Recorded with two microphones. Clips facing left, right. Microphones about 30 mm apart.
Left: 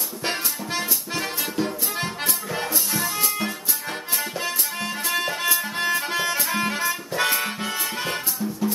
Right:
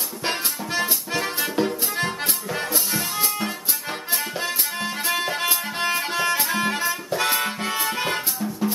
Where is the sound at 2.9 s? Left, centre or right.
Centre.